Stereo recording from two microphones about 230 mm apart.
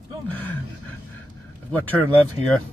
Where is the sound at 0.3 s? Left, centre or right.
Centre.